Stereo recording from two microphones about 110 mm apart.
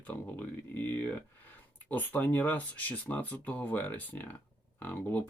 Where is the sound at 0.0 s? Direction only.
15° left (ahead or behind).